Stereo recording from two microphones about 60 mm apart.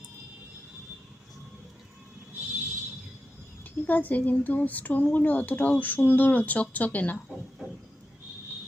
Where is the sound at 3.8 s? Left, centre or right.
Left.